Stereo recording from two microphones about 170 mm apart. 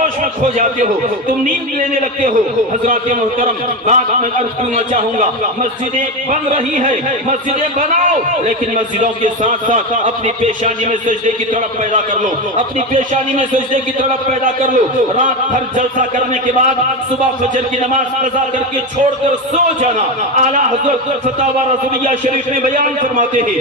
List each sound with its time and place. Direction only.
0.0 s a man's voice: 50° right (ahead or behind)
6.3 s a man's voice: 50° right (ahead or behind)
9.2 s a man's voice: 50° right (ahead or behind)
12.1 s a man's voice: 50° right (ahead or behind)
20.3 s a man's voice: 45° right (ahead or behind)
22.0 s a man's voice: 50° right (ahead or behind)